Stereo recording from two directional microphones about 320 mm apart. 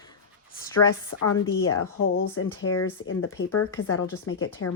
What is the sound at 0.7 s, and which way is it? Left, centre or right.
Speech, left.